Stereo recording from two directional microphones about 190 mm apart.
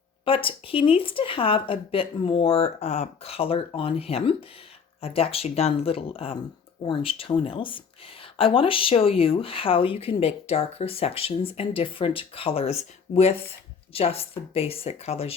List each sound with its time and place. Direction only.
0.3 s speech: 30° left (ahead or behind)